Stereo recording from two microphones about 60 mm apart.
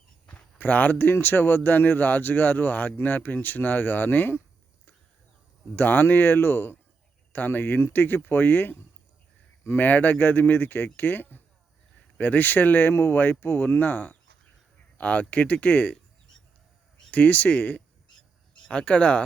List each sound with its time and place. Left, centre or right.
0.3 s speech: left
5.7 s speech: left
17.1 s speech: left